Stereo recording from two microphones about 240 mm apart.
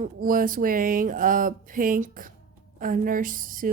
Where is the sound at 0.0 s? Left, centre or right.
Right.